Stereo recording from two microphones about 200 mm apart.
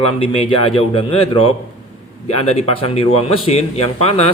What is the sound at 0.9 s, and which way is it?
Speech, 25° left (ahead or behind).